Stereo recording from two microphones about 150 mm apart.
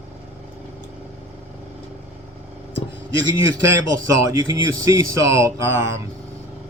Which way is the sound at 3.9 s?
20° right (ahead or behind).